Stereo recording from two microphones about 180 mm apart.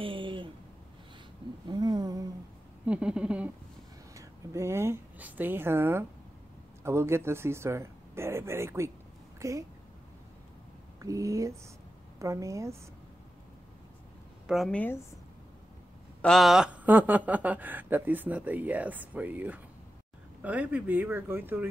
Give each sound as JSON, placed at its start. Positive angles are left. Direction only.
{"t": 0.0, "sound": "a sound", "side_deg": -30}
{"t": 1.7, "sound": "a sound", "side_deg": -20}
{"t": 2.8, "sound": "speech", "side_deg": -5}
{"t": 4.1, "sound": "a woman's voice", "side_deg": -15}
{"t": 11.0, "sound": "speech", "side_deg": -20}
{"t": 14.5, "sound": "a woman's voice", "side_deg": 5}
{"t": 16.2, "sound": "speech", "side_deg": 0}